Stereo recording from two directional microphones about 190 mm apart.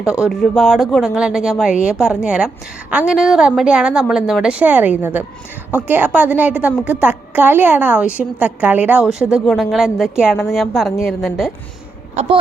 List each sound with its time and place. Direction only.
0.0 s a woman's voice: 5° right (ahead or behind)
12.2 s speech: 35° right (ahead or behind)